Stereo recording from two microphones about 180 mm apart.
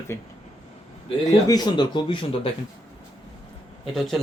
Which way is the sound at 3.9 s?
Centre (ahead or behind).